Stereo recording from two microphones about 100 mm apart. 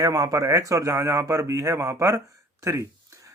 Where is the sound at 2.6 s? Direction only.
30° right (ahead or behind).